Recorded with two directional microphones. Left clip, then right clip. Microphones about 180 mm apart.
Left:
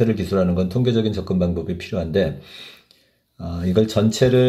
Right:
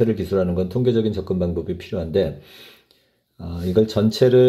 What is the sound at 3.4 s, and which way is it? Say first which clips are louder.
Speech: right 1 dB; 15° right (ahead or behind).